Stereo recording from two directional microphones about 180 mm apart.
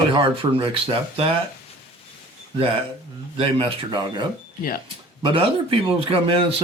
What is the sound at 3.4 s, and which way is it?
Speech, 30° right (ahead or behind).